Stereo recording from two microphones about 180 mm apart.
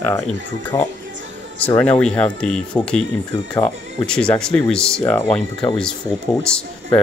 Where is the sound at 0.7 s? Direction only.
20° left (ahead or behind).